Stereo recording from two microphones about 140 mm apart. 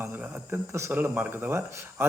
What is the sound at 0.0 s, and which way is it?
Speech, 15° right (ahead or behind).